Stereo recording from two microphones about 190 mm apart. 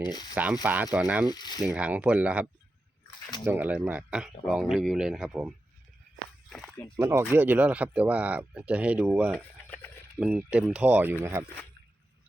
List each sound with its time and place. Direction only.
0.1 s speech: 20° left (ahead or behind)
0.3 s speech: 10° right (ahead or behind)
1.3 s speech: 20° left (ahead or behind)
1.6 s speech: 5° right (ahead or behind)
6.5 s walk: 5° left (ahead or behind)
6.9 s speech: 15° right (ahead or behind)
9.3 s a sound: 10° left (ahead or behind)
10.2 s speech: 5° right (ahead or behind)